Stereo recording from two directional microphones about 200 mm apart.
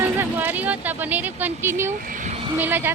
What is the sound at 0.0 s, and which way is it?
A woman's voice, 10° right (ahead or behind).